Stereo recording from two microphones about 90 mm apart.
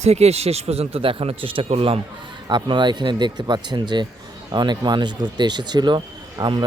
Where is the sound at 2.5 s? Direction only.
60° right (ahead or behind).